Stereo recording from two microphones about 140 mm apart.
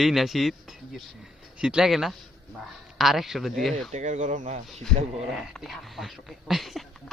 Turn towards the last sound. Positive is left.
turn(degrees=0)  # may be behind; listen again after turning